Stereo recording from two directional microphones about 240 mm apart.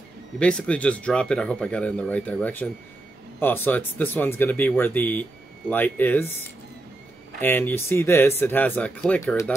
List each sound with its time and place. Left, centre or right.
0.4 s speech: centre
7.3 s speech: centre